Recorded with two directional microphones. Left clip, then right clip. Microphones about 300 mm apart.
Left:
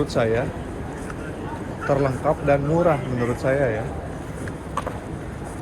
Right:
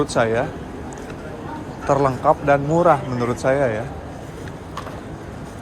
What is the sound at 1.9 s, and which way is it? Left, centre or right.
Speech, centre.